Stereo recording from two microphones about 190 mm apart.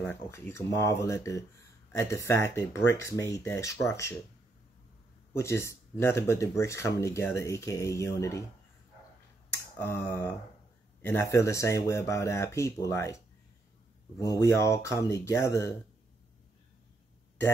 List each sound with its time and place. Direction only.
0.0 s speech: 15° left (ahead or behind)
5.3 s speech: 15° left (ahead or behind)
9.5 s finger snapping: 10° left (ahead or behind)
11.0 s speech: 10° left (ahead or behind)